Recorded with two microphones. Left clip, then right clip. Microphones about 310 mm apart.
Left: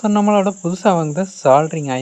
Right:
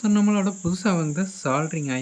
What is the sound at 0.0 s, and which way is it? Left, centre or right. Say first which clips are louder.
Cricket: left 9 dB; centre.